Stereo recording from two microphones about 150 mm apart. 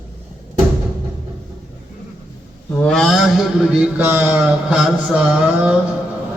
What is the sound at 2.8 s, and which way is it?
A man's voice, 5° left (ahead or behind).